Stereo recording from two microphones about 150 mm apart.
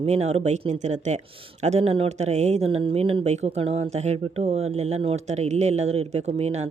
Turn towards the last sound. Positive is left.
turn(degrees=-45)  # may be behind; listen again after turning